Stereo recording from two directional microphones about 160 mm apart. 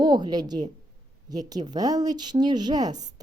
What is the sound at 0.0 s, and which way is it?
Speech, 25° right (ahead or behind).